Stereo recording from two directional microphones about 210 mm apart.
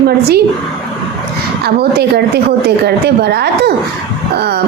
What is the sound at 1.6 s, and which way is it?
A woman's voice, 50° right (ahead or behind).